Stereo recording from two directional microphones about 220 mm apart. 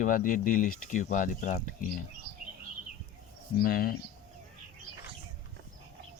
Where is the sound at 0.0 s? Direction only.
35° left (ahead or behind).